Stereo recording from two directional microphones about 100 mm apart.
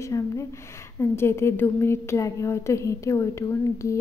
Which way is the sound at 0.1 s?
35° left (ahead or behind).